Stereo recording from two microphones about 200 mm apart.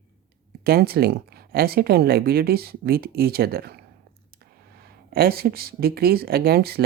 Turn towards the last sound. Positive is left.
turn(degrees=-50)  # may be behind; listen again after turning